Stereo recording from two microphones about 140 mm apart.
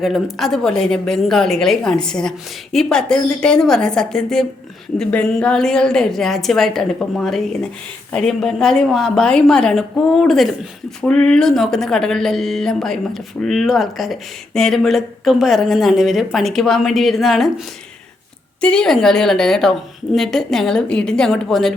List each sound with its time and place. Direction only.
0.0 s a woman's voice: centre (ahead or behind)
18.6 s a woman's voice: 5° left (ahead or behind)